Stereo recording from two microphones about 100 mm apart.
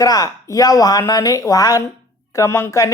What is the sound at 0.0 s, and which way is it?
A woman's voice, 35° left (ahead or behind).